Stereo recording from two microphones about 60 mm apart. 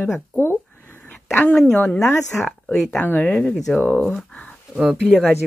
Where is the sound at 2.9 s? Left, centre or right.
Left.